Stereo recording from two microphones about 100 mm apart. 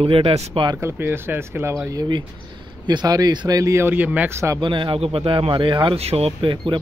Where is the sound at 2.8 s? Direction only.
45° right (ahead or behind).